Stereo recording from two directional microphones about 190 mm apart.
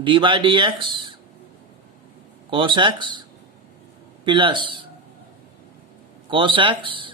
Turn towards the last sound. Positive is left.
turn(degrees=-25)  # may be behind; listen again after turning